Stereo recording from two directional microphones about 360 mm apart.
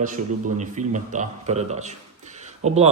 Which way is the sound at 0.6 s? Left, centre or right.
Centre.